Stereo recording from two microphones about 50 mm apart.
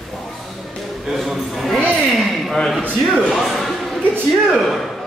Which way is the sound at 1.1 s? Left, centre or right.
Centre.